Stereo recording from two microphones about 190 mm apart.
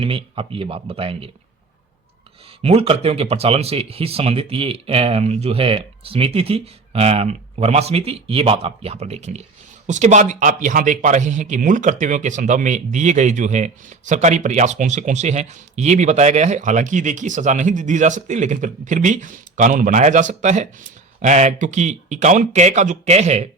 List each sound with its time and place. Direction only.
0.0 s speech: 30° right (ahead or behind)
2.6 s speech: 30° right (ahead or behind)